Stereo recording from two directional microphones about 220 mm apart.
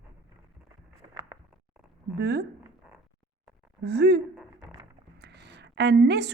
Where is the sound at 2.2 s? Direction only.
50° right (ahead or behind).